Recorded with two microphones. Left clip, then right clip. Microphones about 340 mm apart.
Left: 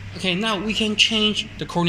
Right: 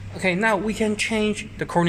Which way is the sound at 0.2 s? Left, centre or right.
Right.